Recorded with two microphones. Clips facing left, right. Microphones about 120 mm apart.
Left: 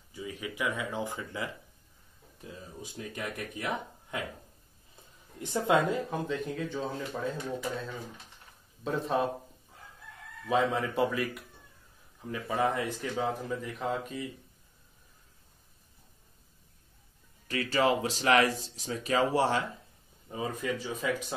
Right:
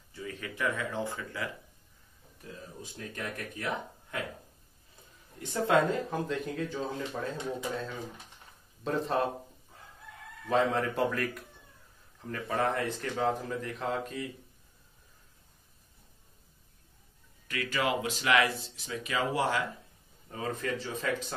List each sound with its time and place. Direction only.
0.1 s speech: 15° left (ahead or behind)
5.4 s speech: 20° left (ahead or behind)
6.0 s speech: centre (ahead or behind)
10.5 s speech: 5° left (ahead or behind)
17.5 s speech: 35° left (ahead or behind)
20.2 s a man's voice: 15° left (ahead or behind)